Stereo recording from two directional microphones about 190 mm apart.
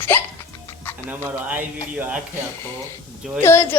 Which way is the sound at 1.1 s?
10° right (ahead or behind).